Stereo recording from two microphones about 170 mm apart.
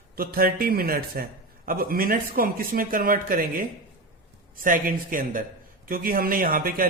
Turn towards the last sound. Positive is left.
turn(degrees=-55)  # may be behind; listen again after turning